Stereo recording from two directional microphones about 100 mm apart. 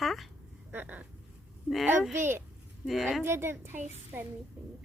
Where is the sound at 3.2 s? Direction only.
25° right (ahead or behind).